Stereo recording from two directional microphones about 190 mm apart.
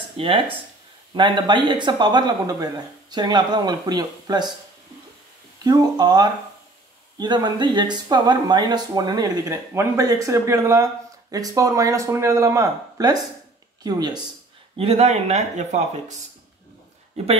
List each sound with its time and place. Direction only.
0.2 s speech: 30° right (ahead or behind)
5.6 s speech: 20° right (ahead or behind)
14.8 s speech: 35° right (ahead or behind)